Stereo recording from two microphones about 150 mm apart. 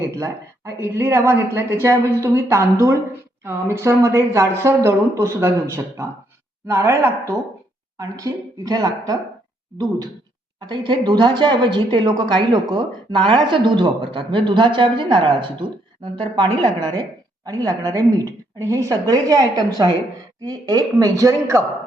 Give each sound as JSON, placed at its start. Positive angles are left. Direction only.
{"t": 0.0, "sound": "a woman's voice", "side_deg": -20}